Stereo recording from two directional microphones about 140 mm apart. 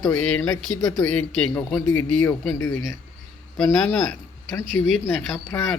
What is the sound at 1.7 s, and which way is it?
Speech, 20° left (ahead or behind).